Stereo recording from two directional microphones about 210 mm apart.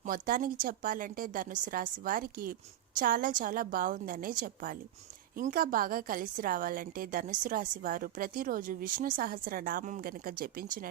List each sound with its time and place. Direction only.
0.0 s a woman's voice: 40° right (ahead or behind)